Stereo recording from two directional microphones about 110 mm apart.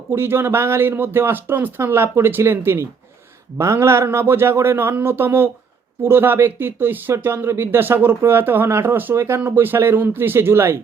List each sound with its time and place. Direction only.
0.1 s speech: 20° right (ahead or behind)